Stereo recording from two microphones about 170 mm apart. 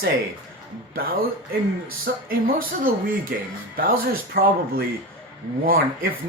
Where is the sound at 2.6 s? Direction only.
55° right (ahead or behind).